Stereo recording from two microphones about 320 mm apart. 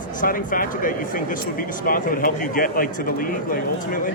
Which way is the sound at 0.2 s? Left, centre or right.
Left.